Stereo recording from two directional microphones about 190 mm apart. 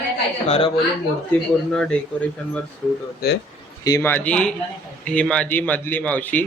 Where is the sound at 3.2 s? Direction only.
55° left (ahead or behind).